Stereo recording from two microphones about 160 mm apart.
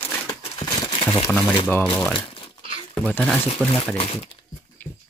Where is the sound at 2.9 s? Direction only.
5° left (ahead or behind).